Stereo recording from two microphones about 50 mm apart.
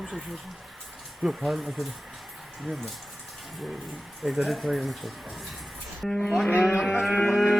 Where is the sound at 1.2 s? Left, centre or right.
Centre.